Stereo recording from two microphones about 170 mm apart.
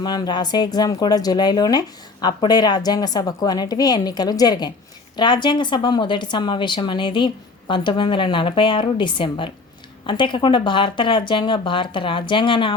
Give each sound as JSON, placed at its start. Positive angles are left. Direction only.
{"t": 0.0, "sound": "speech", "side_deg": 25}